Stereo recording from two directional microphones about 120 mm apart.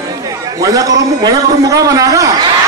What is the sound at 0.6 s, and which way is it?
A man's voice, 30° right (ahead or behind).